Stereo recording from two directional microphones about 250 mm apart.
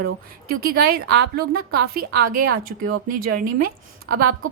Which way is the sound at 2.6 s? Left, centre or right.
Right.